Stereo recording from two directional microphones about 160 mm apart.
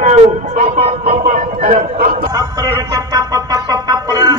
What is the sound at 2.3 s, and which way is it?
Music, 25° right (ahead or behind).